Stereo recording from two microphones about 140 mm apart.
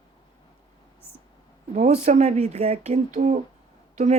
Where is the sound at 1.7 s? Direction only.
55° right (ahead or behind).